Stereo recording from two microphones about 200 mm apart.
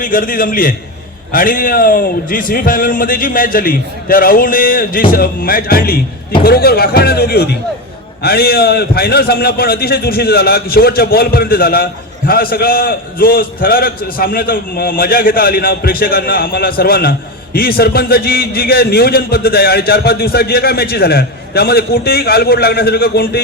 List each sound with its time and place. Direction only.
0.0 s a man's voice: 45° left (ahead or behind)